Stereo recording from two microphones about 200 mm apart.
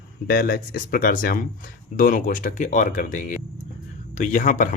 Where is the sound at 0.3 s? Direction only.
45° left (ahead or behind).